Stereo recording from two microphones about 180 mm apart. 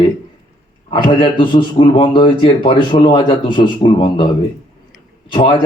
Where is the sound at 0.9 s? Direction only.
25° left (ahead or behind).